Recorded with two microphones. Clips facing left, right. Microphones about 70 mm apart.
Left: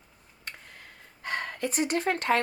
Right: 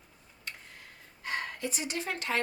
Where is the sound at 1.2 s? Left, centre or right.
Left.